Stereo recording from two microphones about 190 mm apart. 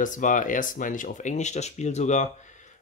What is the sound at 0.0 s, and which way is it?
Speech, 40° left (ahead or behind).